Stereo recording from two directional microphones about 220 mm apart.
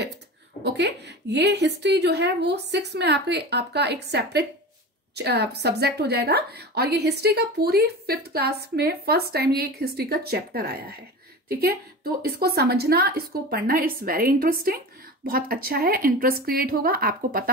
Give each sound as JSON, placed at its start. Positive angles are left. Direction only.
{"t": 0.7, "sound": "a woman's voice", "side_deg": -50}